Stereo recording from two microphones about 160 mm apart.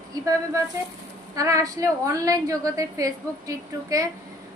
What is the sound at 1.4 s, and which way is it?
A woman's voice, 20° right (ahead or behind).